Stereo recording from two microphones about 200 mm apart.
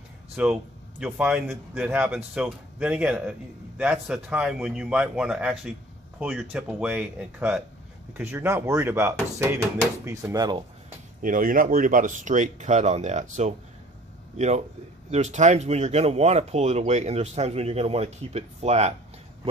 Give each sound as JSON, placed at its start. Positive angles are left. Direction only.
{"t": 0.4, "sound": "speech", "side_deg": -5}
{"t": 11.2, "sound": "a man's voice", "side_deg": -45}